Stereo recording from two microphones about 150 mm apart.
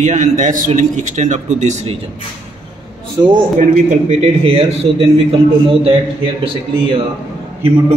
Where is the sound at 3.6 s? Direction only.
50° right (ahead or behind).